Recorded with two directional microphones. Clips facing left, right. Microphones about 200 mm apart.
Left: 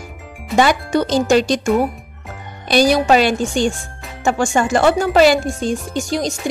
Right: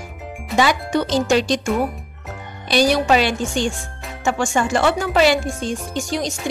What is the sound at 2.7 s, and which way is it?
Speech, 45° left (ahead or behind).